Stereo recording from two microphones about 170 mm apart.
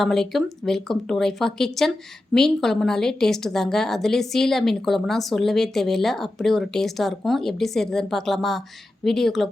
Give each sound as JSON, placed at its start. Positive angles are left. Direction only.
{"t": 0.0, "sound": "a woman's voice", "side_deg": 0}